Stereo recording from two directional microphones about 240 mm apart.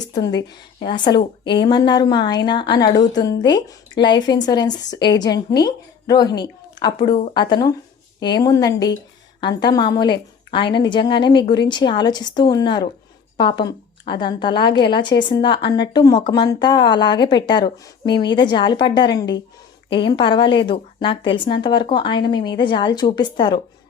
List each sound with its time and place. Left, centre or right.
0.8 s speech: centre